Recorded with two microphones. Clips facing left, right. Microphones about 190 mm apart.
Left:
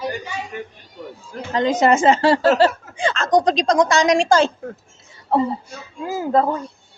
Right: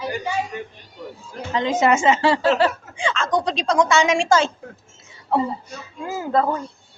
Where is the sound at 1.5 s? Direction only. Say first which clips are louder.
Left 2 dB; 40° left (ahead or behind).